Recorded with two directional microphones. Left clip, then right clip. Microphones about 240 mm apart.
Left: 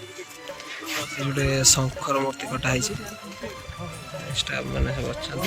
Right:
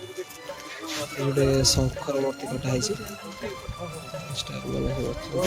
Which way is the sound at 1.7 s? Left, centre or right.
Centre.